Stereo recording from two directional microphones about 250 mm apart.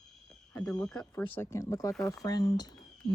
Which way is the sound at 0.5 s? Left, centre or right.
Centre.